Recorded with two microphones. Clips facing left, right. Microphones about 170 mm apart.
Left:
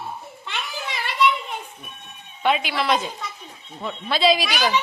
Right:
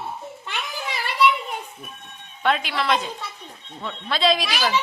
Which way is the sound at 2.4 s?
5° left (ahead or behind).